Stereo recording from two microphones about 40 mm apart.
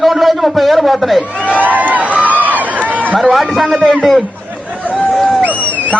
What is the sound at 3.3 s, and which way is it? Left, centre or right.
Speech, centre.